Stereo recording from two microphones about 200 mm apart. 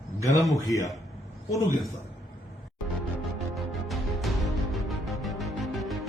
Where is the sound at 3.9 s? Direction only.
Centre (ahead or behind).